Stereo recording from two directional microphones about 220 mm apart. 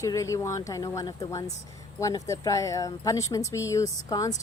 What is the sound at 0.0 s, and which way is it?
Speech, 15° left (ahead or behind).